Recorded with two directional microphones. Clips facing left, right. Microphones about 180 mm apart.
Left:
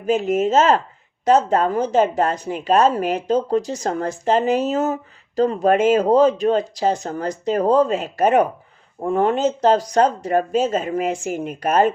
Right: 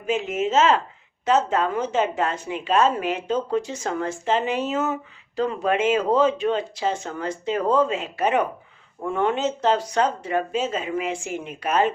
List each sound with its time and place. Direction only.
0.0 s speech: 40° left (ahead or behind)